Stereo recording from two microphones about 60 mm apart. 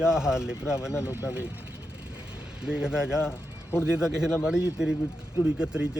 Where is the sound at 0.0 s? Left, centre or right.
Centre.